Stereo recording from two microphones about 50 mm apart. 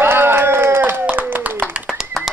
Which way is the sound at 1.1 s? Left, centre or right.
Right.